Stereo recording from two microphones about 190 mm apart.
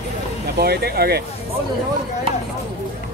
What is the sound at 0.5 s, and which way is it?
Speech, 55° right (ahead or behind).